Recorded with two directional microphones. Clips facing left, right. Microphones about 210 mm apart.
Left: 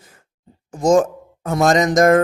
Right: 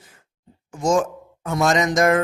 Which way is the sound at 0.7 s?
40° left (ahead or behind).